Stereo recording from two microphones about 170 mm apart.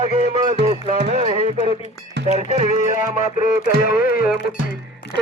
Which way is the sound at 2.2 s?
85° right.